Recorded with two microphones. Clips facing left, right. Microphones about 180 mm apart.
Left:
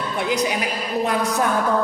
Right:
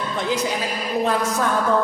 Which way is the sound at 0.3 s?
15° left (ahead or behind).